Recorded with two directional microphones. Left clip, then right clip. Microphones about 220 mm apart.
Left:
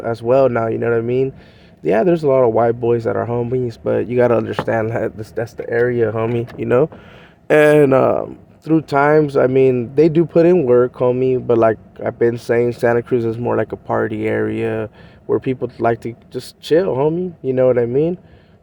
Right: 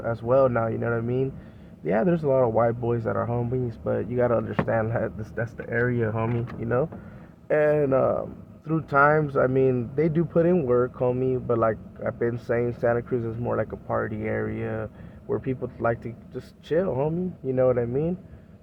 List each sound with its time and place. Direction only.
0.0 s speech: 30° left (ahead or behind)